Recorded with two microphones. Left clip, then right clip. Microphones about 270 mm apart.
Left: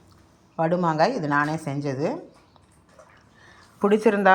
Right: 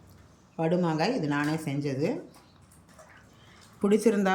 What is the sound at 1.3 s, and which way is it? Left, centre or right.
Speech, left.